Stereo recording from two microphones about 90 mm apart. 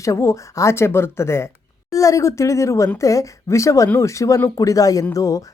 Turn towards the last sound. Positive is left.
turn(degrees=40)  # may be behind; listen again after turning